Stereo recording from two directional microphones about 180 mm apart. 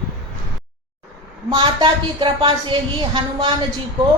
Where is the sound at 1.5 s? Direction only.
25° right (ahead or behind).